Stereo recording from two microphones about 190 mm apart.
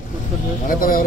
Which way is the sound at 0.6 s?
50° left (ahead or behind).